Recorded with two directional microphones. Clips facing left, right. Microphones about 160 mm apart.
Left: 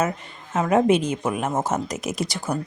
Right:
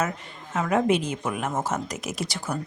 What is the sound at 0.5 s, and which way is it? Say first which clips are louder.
Speech: left 4 dB; 25° left (ahead or behind).